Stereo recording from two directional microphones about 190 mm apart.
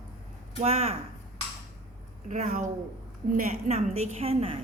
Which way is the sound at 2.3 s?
40° right (ahead or behind).